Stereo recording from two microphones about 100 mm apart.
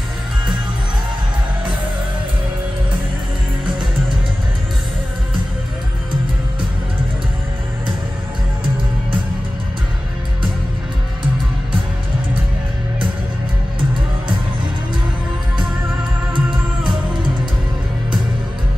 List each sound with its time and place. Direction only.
16.3 s music: 55° right (ahead or behind)